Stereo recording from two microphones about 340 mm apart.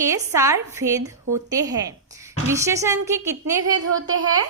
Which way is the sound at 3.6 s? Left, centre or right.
Right.